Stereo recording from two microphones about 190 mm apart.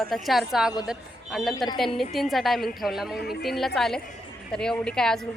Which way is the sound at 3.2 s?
55° left (ahead or behind).